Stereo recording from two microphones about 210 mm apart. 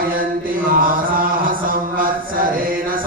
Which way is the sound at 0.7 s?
40° right (ahead or behind).